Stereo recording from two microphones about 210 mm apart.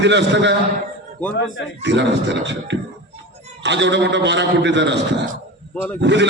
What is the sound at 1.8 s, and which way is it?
A man's voice, 55° right (ahead or behind).